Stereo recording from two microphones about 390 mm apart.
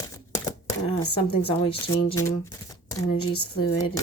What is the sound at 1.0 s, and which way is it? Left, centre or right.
Speech, left.